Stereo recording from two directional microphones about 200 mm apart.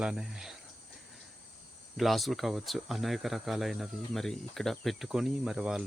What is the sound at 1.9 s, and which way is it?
Speech, centre (ahead or behind).